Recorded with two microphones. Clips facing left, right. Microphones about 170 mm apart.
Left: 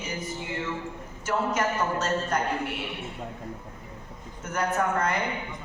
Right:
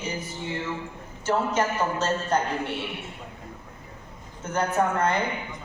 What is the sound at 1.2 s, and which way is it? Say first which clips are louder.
A woman's voice: right 2 dB; 30° right (ahead or behind).